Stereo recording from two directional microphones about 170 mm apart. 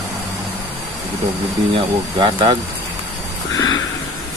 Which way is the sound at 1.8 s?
30° right (ahead or behind).